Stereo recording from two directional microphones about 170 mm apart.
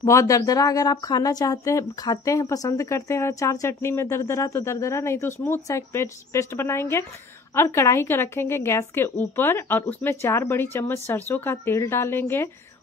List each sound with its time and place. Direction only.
0.0 s speech: 20° left (ahead or behind)